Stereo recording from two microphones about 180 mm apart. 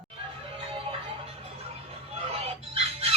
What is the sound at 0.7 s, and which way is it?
Music, 30° right (ahead or behind).